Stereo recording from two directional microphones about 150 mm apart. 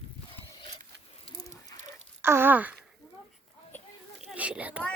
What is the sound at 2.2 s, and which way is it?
Speech, 15° right (ahead or behind).